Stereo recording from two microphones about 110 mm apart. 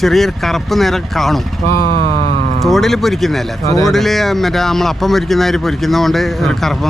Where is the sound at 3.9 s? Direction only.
Centre (ahead or behind).